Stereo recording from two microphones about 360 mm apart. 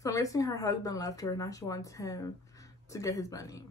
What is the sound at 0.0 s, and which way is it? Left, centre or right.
A woman's voice, centre.